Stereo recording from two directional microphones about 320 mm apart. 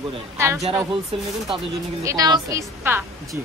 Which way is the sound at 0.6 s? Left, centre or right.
Centre.